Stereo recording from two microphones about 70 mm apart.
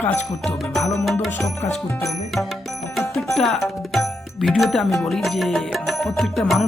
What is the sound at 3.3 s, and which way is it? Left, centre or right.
Music, centre.